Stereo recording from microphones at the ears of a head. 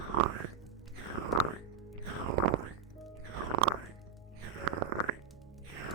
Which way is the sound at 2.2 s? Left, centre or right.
Right.